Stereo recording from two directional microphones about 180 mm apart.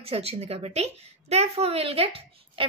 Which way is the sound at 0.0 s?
35° right (ahead or behind).